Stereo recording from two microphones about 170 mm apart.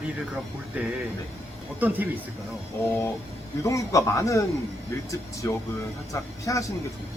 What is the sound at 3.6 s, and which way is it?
Speech, 20° left (ahead or behind).